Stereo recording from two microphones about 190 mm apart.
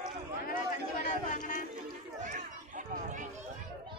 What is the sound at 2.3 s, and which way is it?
Chatter, 40° right (ahead or behind).